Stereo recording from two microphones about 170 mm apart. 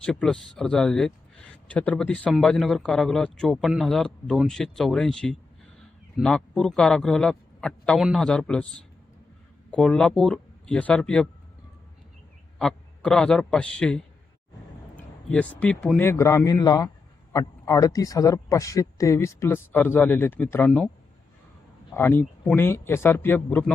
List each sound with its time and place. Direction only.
0.0 s speech: 5° left (ahead or behind)
12.5 s a man's voice: 5° left (ahead or behind)
21.9 s speech: 10° left (ahead or behind)